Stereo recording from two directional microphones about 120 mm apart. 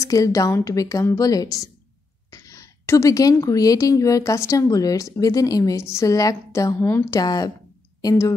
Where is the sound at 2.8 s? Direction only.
25° left (ahead or behind).